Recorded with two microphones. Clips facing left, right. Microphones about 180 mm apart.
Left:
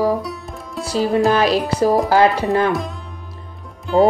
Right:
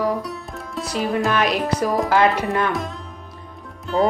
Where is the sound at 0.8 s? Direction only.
30° left (ahead or behind).